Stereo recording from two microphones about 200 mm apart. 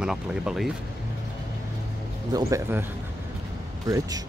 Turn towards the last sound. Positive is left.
turn(degrees=-20)  # may be behind; listen again after turning